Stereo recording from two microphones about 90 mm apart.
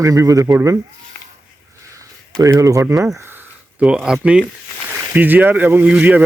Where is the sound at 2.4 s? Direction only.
40° right (ahead or behind).